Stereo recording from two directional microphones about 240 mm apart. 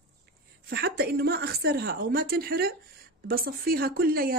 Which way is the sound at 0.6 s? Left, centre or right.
Right.